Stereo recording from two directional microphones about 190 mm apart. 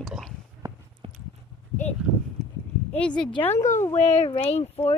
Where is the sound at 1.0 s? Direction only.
30° right (ahead or behind).